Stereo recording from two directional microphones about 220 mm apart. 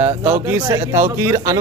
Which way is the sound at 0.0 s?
30° right (ahead or behind).